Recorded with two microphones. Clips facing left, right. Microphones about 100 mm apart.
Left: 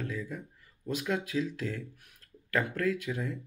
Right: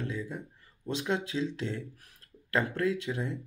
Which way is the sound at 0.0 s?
25° right (ahead or behind).